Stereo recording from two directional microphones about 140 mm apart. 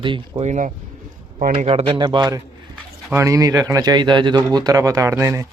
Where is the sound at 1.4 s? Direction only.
80° right.